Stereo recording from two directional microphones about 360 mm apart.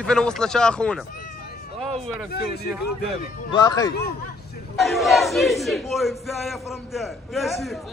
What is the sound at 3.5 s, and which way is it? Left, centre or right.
Speech, centre.